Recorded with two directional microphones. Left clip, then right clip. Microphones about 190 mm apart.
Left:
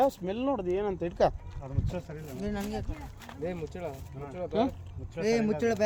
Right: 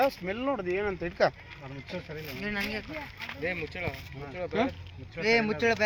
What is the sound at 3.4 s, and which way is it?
Speech, 65° left (ahead or behind).